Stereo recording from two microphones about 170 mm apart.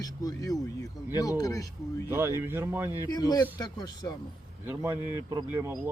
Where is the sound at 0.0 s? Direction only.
20° left (ahead or behind).